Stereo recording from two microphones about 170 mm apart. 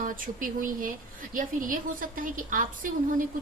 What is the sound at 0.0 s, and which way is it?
A woman's voice, 50° right (ahead or behind).